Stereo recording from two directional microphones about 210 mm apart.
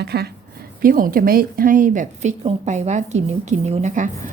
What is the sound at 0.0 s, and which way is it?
A woman's voice, 50° right (ahead or behind).